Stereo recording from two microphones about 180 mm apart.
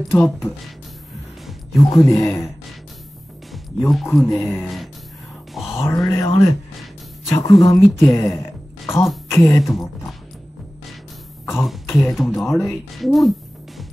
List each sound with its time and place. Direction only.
0.1 s speech: 5° left (ahead or behind)
1.8 s speech: 15° left (ahead or behind)
3.8 s speech: centre (ahead or behind)
5.5 s a sound: centre (ahead or behind)
5.8 s speech: 15° left (ahead or behind)
8.8 s music: 15° left (ahead or behind)
9.3 s speech: 10° left (ahead or behind)
9.6 s speech: centre (ahead or behind)
11.6 s speech: centre (ahead or behind)